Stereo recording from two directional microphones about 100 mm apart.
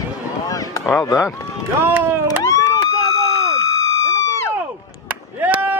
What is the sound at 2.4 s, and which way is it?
Police car, 35° left (ahead or behind).